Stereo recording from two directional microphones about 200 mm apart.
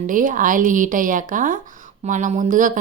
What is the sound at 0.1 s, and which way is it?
A woman's voice, 40° right (ahead or behind).